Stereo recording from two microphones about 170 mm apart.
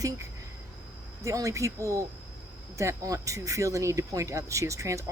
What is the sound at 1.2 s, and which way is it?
Speech, 20° right (ahead or behind).